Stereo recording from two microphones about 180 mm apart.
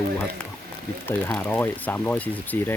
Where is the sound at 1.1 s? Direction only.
10° left (ahead or behind).